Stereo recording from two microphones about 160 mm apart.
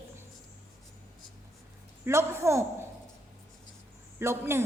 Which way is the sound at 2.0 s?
15° right (ahead or behind).